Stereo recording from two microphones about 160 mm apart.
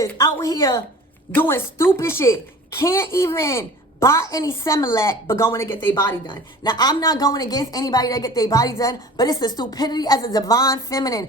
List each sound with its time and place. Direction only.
0.0 s a sound: 15° left (ahead or behind)
0.4 s speech: 25° left (ahead or behind)
1.3 s a woman's voice: 15° left (ahead or behind)
6.6 s speech: 25° left (ahead or behind)